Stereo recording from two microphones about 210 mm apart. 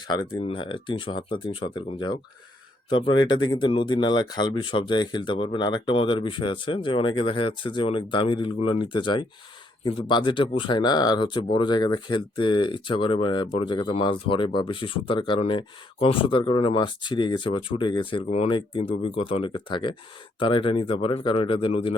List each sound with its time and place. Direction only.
0.1 s speech: 25° left (ahead or behind)